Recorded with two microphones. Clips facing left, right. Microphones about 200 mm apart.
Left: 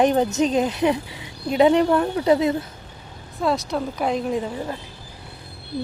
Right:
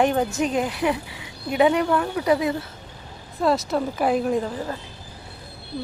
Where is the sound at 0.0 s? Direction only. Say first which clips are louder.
Left 3 dB; 20° left (ahead or behind).